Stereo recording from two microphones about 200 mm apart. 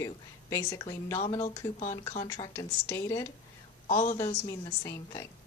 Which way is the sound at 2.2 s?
20° left (ahead or behind).